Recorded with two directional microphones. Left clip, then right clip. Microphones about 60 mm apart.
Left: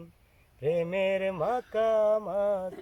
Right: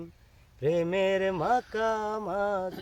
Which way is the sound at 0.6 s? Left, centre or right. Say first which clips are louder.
Right 1 dB; right.